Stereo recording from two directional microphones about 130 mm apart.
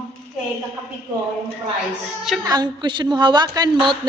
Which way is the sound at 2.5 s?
35° right (ahead or behind).